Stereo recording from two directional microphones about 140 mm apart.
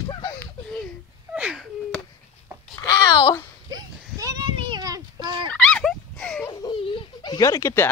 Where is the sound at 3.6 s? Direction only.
30° right (ahead or behind).